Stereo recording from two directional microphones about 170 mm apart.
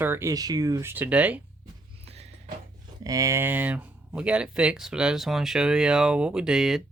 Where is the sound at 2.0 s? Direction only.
35° right (ahead or behind).